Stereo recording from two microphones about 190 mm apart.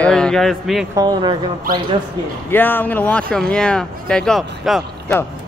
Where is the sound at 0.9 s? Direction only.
20° right (ahead or behind).